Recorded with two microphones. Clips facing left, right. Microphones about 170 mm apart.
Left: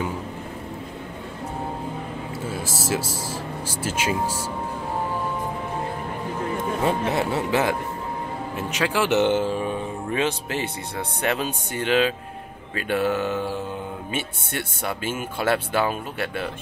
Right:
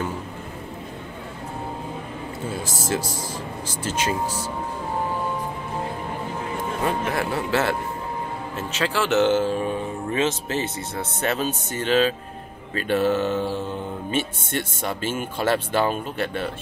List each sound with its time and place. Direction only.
2.6 s speech: 5° left (ahead or behind)
7.1 s speech: 20° left (ahead or behind)
14.8 s speech: 10° left (ahead or behind)